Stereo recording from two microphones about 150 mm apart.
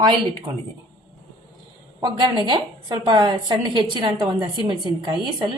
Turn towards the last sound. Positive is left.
turn(degrees=-30)  # may be behind; listen again after turning